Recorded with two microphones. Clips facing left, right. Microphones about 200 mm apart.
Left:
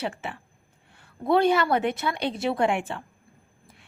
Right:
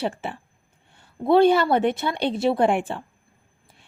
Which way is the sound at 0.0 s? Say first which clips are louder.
Right 4 dB; 30° right (ahead or behind).